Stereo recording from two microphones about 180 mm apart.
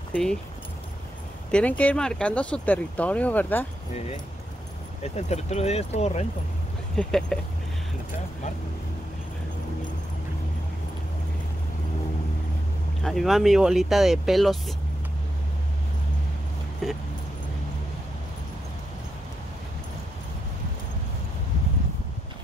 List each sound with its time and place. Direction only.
0.1 s speech: 5° left (ahead or behind)
1.5 s speech: 10° left (ahead or behind)
5.1 s speech: 40° left (ahead or behind)
7.0 s speech: 5° left (ahead or behind)
13.0 s speech: centre (ahead or behind)
16.8 s speech: centre (ahead or behind)